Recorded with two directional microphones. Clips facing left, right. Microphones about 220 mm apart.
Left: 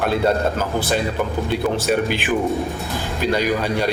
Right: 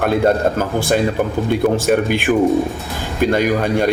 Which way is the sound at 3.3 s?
50° right (ahead or behind).